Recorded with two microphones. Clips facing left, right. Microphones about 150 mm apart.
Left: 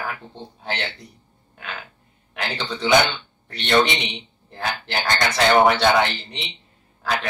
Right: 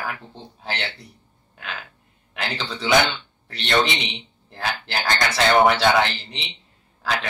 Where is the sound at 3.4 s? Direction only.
Centre (ahead or behind).